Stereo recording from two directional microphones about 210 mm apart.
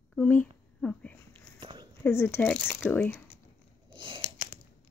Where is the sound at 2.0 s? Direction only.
10° left (ahead or behind).